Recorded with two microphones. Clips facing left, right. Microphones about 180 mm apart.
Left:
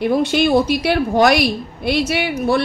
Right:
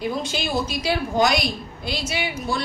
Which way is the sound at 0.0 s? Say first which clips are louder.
Left 10 dB; 65° left (ahead or behind).